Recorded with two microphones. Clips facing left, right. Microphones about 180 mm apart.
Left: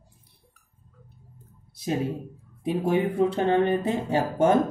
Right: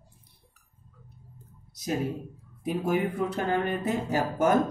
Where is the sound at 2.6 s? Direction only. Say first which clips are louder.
Left 3 dB; 30° left (ahead or behind).